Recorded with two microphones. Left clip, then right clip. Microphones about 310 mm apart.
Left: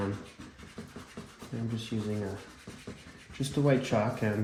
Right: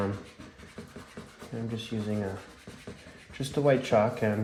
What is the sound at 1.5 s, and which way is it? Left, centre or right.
Speech, right.